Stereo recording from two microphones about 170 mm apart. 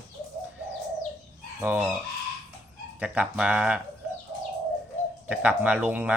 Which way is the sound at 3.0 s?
5° right (ahead or behind).